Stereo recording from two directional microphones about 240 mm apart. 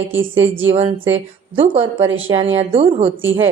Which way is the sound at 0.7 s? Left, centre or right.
Right.